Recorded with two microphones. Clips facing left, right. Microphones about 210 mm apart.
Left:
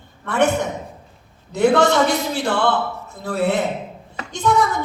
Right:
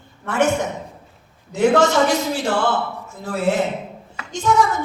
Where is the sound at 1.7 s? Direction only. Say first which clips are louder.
Even; 60° left (ahead or behind).